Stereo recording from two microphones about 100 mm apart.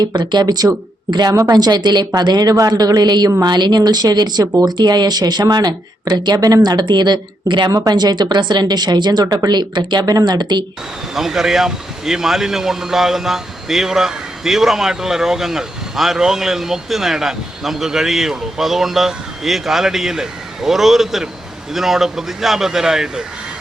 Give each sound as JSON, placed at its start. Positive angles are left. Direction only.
{"t": 0.0, "sound": "speech", "side_deg": -45}
{"t": 7.7, "sound": "speech", "side_deg": -40}
{"t": 11.1, "sound": "speech", "side_deg": -5}